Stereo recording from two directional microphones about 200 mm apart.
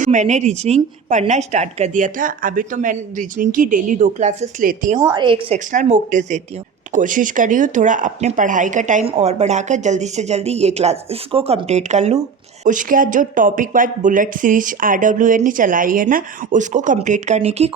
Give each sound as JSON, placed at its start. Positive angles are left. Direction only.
{"t": 0.0, "sound": "speech", "side_deg": -40}
{"t": 5.1, "sound": "a woman's voice", "side_deg": -25}
{"t": 5.5, "sound": "speech", "side_deg": -35}